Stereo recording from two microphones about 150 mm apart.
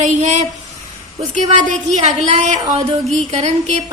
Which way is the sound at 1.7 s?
50° right (ahead or behind).